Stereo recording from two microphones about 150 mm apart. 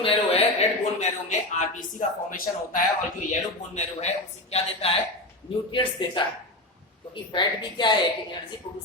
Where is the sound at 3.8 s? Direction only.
45° left (ahead or behind).